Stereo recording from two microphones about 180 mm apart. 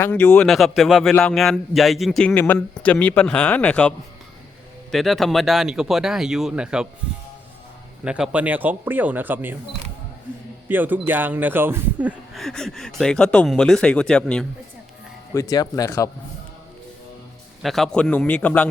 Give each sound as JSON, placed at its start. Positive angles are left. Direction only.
{"t": 0.0, "sound": "a man's voice", "side_deg": 10}
{"t": 8.0, "sound": "speech", "side_deg": -5}
{"t": 10.7, "sound": "speech", "side_deg": -10}
{"t": 15.3, "sound": "a man's voice", "side_deg": 20}
{"t": 17.6, "sound": "a man's voice", "side_deg": 0}